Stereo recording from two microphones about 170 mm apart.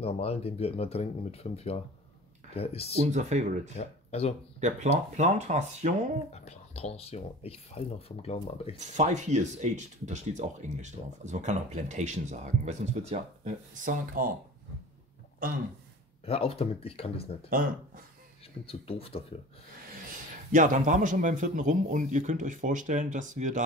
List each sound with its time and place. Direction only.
0.0 s speech: 35° left (ahead or behind)
3.1 s speech: 45° right (ahead or behind)
3.7 s speech: 40° left (ahead or behind)
4.6 s speech: 45° right (ahead or behind)
6.3 s speech: 40° left (ahead or behind)
8.7 s speech: 45° right (ahead or behind)
16.3 s speech: 35° left (ahead or behind)
17.5 s speech: 55° right (ahead or behind)
18.7 s speech: 35° left (ahead or behind)
20.5 s speech: 50° right (ahead or behind)